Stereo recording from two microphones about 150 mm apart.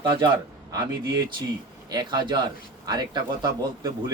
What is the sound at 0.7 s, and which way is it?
A man's voice, 25° right (ahead or behind).